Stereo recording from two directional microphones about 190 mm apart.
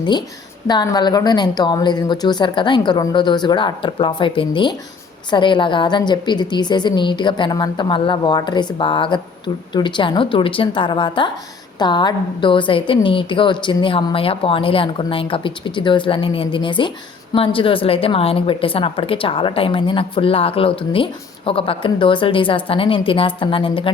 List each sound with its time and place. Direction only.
0.0 s a woman's voice: 25° left (ahead or behind)